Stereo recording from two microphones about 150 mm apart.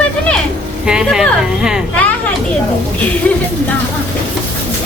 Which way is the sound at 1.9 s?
10° left (ahead or behind).